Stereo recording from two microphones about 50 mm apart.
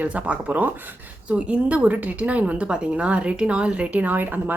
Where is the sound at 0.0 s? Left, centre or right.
Right.